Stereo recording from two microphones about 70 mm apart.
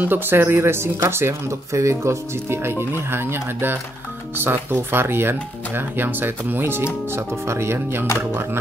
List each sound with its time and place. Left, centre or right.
0.0 s speech: right